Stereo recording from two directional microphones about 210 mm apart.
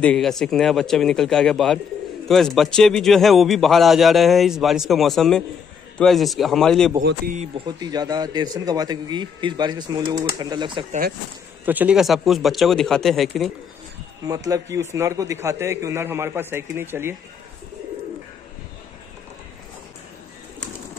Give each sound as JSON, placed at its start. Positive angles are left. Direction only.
{"t": 0.0, "sound": "a man's voice", "side_deg": 5}
{"t": 7.3, "sound": "a man's voice", "side_deg": -20}
{"t": 11.6, "sound": "a man's voice", "side_deg": -10}
{"t": 14.2, "sound": "a man's voice", "side_deg": -15}